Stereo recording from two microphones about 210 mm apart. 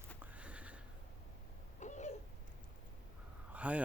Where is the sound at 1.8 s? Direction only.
35° left (ahead or behind).